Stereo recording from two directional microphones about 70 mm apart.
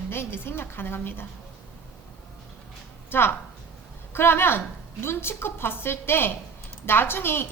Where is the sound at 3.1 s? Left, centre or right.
Left.